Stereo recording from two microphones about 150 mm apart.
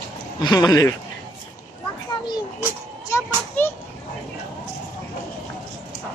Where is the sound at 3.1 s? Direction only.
15° left (ahead or behind).